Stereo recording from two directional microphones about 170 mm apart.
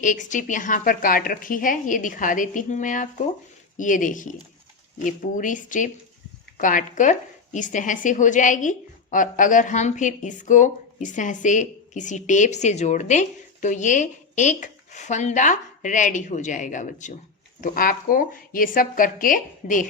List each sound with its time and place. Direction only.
0.0 s speech: 50° left (ahead or behind)